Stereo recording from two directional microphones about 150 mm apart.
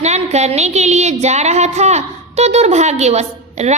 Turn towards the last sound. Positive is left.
turn(degrees=-45)  # may be behind; listen again after turning